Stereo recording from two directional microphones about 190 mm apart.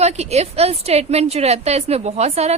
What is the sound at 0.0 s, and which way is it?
A woman's voice, 35° right (ahead or behind).